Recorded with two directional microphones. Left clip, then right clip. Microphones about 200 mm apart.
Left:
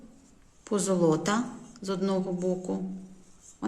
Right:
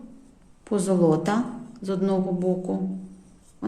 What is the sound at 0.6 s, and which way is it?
A woman's voice, 5° left (ahead or behind).